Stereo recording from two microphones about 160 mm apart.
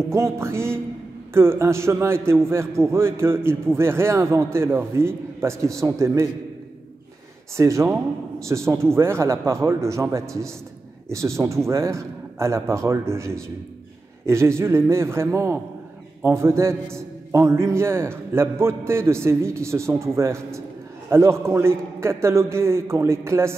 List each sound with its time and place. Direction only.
0.1 s a man's voice: 15° right (ahead or behind)
7.5 s a man's voice: 15° right (ahead or behind)